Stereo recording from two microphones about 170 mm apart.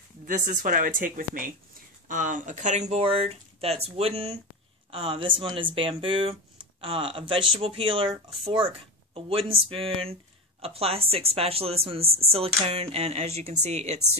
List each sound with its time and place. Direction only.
0.2 s a woman's voice: 50° right (ahead or behind)